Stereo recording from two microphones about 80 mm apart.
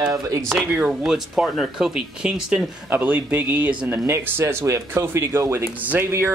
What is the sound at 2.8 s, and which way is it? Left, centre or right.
Speech, right.